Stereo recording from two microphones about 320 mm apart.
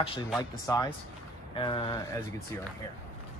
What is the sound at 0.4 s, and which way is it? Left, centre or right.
Speech, centre.